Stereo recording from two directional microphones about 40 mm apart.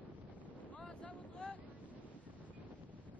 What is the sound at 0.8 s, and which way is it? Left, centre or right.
Boat, left.